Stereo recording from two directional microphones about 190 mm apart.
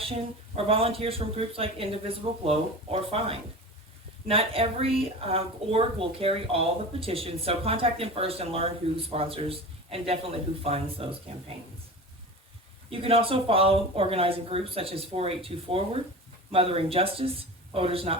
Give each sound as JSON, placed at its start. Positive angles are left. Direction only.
{"t": 0.0, "sound": "a woman's voice", "side_deg": -30}
{"t": 12.9, "sound": "a woman's voice", "side_deg": -30}